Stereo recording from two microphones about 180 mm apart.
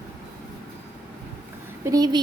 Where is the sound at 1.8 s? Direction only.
20° right (ahead or behind).